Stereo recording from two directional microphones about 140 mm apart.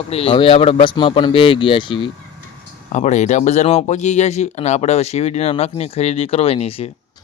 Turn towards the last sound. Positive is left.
turn(degrees=45)  # may be behind; listen again after turning